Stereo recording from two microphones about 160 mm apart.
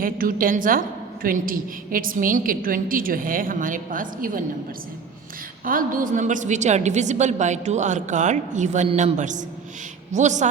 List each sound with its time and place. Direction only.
0.0 s a woman's voice: 60° right (ahead or behind)
5.6 s a woman's voice: 60° right (ahead or behind)